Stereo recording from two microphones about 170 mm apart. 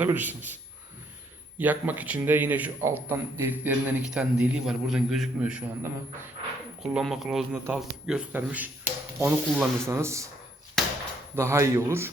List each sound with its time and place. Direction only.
0.0 s a man's voice: 10° right (ahead or behind)
1.5 s a man's voice: 10° right (ahead or behind)
7.5 s a man's voice: 15° right (ahead or behind)
7.8 s a man's voice: 5° right (ahead or behind)
11.3 s a man's voice: 15° right (ahead or behind)